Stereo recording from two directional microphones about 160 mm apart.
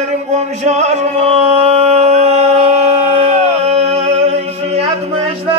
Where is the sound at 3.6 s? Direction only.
40° right (ahead or behind).